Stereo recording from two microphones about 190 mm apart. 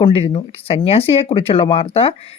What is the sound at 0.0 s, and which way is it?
Speech, 30° left (ahead or behind).